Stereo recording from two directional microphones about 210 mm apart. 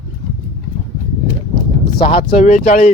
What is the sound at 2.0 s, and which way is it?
Speech, 25° left (ahead or behind).